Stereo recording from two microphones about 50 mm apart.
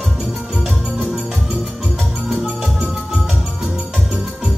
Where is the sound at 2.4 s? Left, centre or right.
Centre.